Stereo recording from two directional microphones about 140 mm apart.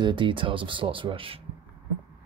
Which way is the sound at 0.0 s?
35° right (ahead or behind).